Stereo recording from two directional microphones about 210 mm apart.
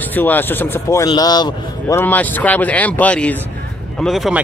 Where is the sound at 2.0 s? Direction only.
10° left (ahead or behind).